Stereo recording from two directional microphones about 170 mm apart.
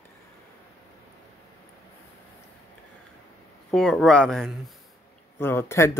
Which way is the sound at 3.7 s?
5° left (ahead or behind).